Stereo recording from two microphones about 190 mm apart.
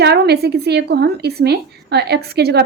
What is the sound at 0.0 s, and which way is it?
A woman's voice, 60° right (ahead or behind).